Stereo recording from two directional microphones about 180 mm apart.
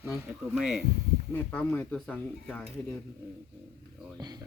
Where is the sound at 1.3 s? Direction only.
10° left (ahead or behind).